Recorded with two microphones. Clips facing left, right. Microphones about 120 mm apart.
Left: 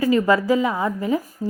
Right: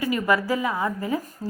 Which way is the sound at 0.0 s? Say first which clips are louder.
Left 5 dB; 30° left (ahead or behind).